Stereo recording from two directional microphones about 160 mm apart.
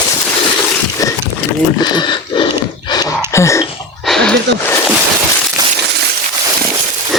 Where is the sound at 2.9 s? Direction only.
20° left (ahead or behind).